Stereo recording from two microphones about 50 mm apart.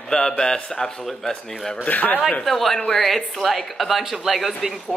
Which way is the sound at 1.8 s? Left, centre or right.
Left.